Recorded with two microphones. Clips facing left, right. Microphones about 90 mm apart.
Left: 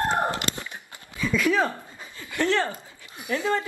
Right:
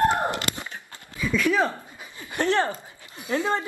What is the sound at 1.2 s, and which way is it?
Speech, 10° right (ahead or behind).